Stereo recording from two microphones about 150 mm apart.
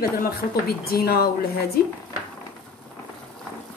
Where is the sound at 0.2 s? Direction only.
90° left.